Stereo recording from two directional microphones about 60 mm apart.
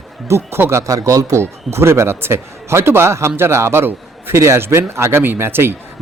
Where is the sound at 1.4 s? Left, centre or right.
Right.